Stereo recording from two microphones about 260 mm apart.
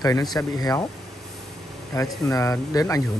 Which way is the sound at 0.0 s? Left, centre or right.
Centre.